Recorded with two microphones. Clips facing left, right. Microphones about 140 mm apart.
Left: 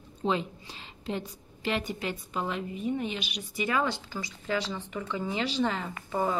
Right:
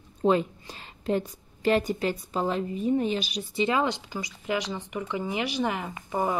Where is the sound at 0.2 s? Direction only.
45° right (ahead or behind).